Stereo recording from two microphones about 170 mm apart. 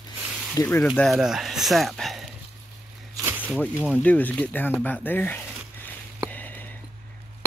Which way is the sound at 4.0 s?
10° left (ahead or behind).